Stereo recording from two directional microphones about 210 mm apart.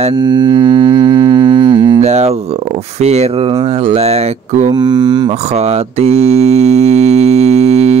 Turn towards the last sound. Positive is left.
turn(degrees=-30)  # may be behind; listen again after turning